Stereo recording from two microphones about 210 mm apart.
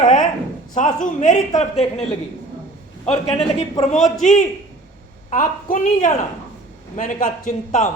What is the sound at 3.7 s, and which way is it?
A man's voice, 35° left (ahead or behind).